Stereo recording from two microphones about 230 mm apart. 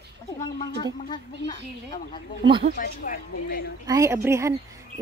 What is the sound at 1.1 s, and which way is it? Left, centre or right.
Speech, centre.